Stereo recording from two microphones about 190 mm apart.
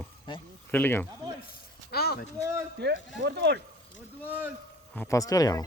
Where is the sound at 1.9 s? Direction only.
55° left (ahead or behind).